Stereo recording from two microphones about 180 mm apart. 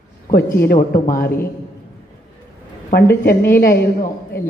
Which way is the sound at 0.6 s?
55° left (ahead or behind).